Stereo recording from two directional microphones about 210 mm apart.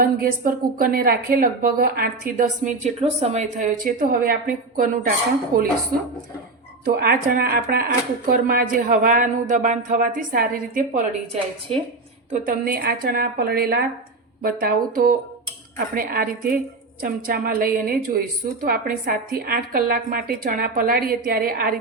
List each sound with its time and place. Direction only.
0.0 s a woman's voice: 45° right (ahead or behind)
6.8 s a woman's voice: 45° right (ahead or behind)
11.7 s a woman's voice: 30° right (ahead or behind)
12.3 s a woman's voice: 40° right (ahead or behind)